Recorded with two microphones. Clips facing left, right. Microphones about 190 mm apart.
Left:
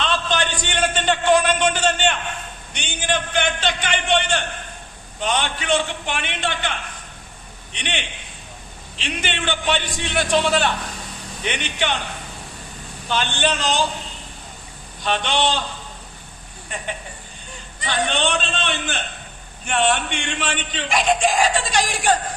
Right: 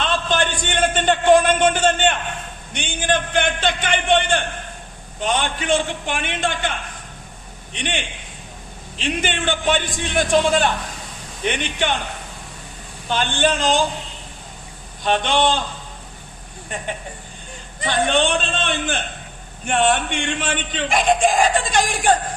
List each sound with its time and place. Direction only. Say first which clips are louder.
0.0 s a sound: right 2 dB; 50° right (ahead or behind)
2.7 s a man's voice: right 3 dB; 50° right (ahead or behind)
13.1 s a man's voice: right 3 dB; 50° right (ahead or behind)
15.0 s a man's voice: right 3 dB; 50° right (ahead or behind)
17.7 s a man's voice: right 4 dB; 50° right (ahead or behind)